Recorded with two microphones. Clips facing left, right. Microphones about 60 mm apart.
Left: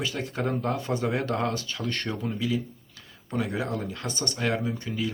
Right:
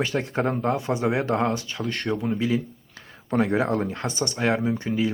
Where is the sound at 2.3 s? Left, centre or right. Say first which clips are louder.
Right 4 dB; right.